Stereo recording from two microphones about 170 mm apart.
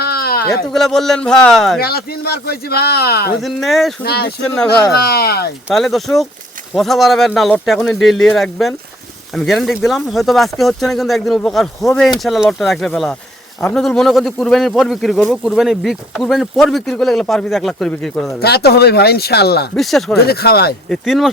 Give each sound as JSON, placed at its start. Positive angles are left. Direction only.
{"t": 0.0, "sound": "a sound", "side_deg": 65}
{"t": 0.7, "sound": "a man's voice", "side_deg": 0}
{"t": 1.8, "sound": "a man's voice", "side_deg": 65}
{"t": 3.4, "sound": "a man's voice", "side_deg": 0}
{"t": 4.0, "sound": "a man's voice", "side_deg": 70}
{"t": 4.4, "sound": "speech", "side_deg": 5}
{"t": 4.9, "sound": "a man's voice", "side_deg": 65}
{"t": 5.6, "sound": "a man's voice", "side_deg": 0}
{"t": 18.4, "sound": "a man's voice", "side_deg": 70}
{"t": 19.7, "sound": "a man's voice", "side_deg": 0}
{"t": 20.1, "sound": "a man's voice", "side_deg": 70}
{"t": 20.9, "sound": "a man's voice", "side_deg": 0}